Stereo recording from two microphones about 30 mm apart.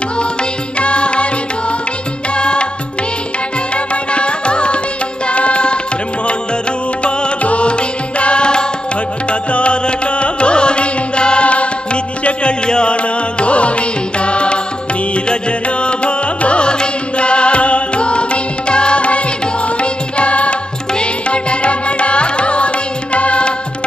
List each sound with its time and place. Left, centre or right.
0.7 s music: left
2.3 s music: left
3.7 s music: left
7.0 s music: left
12.9 s music: left
15.8 s music: left